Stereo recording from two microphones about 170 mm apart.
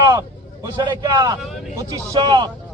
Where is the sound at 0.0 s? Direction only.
20° right (ahead or behind).